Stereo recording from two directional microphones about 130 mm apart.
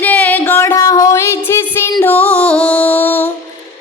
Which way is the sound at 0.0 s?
15° left (ahead or behind).